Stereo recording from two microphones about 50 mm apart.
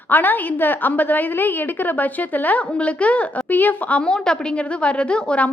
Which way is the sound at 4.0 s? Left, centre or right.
Centre.